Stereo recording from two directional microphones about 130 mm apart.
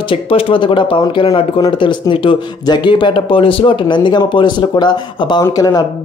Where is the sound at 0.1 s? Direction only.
45° left (ahead or behind).